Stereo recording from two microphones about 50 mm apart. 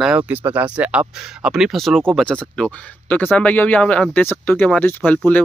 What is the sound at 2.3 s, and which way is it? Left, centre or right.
Speech, centre.